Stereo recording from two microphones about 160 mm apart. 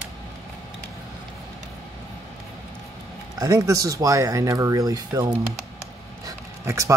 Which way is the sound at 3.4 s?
20° right (ahead or behind).